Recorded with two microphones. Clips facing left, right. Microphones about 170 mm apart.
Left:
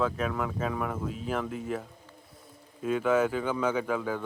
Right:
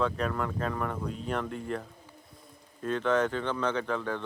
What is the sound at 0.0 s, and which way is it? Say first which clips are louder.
Speech: left 1 dB; 5° left (ahead or behind).